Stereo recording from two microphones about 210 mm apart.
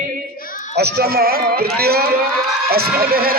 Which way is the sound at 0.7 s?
50° right (ahead or behind).